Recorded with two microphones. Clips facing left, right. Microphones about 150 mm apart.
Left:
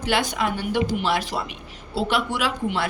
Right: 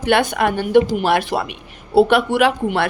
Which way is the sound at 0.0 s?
60° right (ahead or behind).